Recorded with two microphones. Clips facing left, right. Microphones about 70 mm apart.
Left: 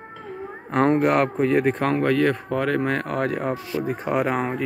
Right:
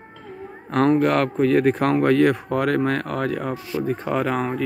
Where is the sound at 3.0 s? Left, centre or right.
Left.